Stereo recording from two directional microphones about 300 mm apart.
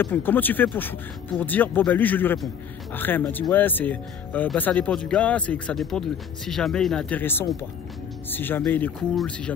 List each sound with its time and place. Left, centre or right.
0.0 s a man's voice: centre